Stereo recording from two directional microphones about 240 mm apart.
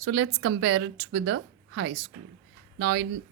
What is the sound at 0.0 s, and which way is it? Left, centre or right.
A woman's voice, right.